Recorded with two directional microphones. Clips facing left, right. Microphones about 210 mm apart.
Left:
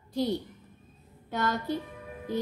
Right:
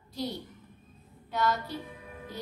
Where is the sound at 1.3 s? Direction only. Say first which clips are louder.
Even; 50° left (ahead or behind).